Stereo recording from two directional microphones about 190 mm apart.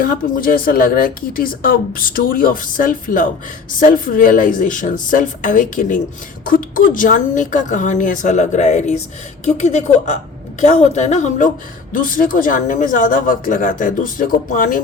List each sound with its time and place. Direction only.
0.0 s a woman's voice: 50° left (ahead or behind)